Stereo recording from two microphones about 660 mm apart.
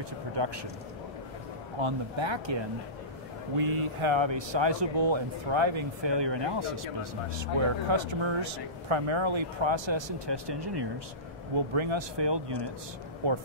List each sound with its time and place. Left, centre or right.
0.4 s speech: right
1.8 s speech: right
3.6 s speech: right